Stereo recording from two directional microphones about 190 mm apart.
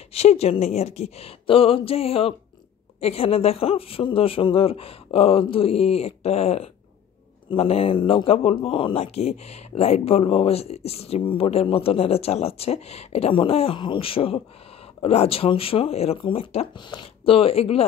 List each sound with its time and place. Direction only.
0.1 s speech: 35° left (ahead or behind)